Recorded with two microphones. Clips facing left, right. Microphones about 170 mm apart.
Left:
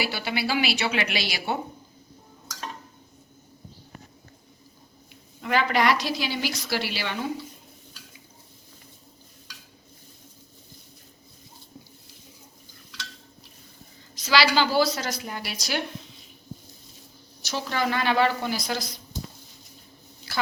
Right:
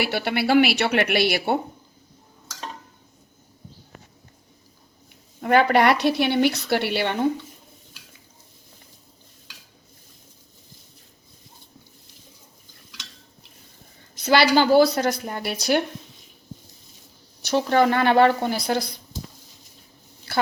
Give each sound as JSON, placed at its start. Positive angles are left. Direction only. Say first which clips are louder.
{"t": 0.0, "sound": "a woman's voice", "louder": "right 5 dB", "side_deg": -60}
{"t": 5.4, "sound": "a woman's voice", "louder": "right 6 dB", "side_deg": -50}
{"t": 14.3, "sound": "a woman's voice", "louder": "right 5 dB", "side_deg": -55}
{"t": 17.5, "sound": "a woman's voice", "louder": "right 8 dB", "side_deg": -50}